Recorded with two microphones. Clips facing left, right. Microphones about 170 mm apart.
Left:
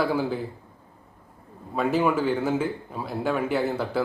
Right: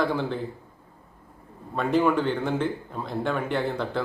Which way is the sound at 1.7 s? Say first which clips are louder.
Even; 5° left (ahead or behind).